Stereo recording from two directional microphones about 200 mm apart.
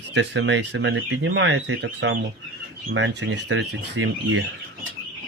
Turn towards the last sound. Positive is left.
turn(degrees=-75)  # may be behind; listen again after turning